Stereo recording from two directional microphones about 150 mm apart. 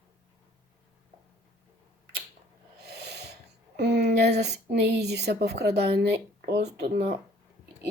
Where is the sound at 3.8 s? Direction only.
90° right.